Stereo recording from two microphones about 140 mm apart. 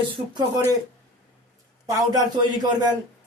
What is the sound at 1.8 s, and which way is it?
A man's voice, 25° right (ahead or behind).